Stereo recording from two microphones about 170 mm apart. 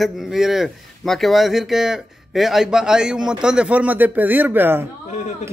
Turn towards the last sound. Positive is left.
turn(degrees=45)  # may be behind; listen again after turning